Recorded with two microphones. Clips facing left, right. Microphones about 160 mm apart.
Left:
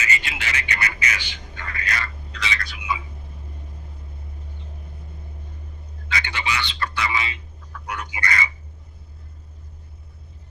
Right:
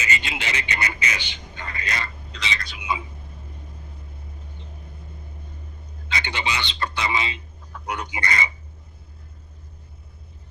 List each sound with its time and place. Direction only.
0.0 s speech: 20° right (ahead or behind)
6.1 s a man's voice: 20° right (ahead or behind)